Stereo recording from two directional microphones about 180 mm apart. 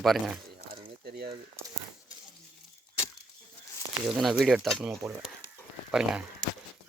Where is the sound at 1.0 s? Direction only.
65° right (ahead or behind).